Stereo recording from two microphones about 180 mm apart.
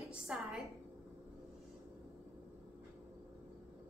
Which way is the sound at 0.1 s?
5° right (ahead or behind).